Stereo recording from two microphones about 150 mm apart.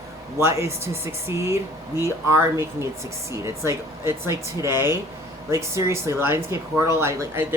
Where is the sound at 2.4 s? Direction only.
15° right (ahead or behind).